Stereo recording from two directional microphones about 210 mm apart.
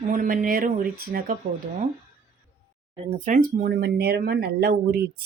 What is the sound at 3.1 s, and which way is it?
Speech, 40° right (ahead or behind).